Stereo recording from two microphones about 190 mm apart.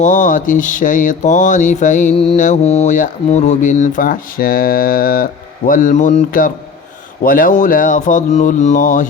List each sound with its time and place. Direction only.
0.0 s speech: 40° left (ahead or behind)